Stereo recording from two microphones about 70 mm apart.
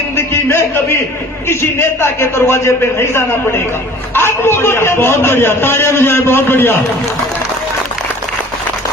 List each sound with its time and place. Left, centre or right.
1.5 s a man's voice: left